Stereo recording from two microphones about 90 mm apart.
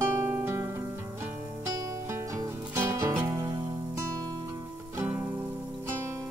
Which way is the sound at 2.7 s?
30° right (ahead or behind).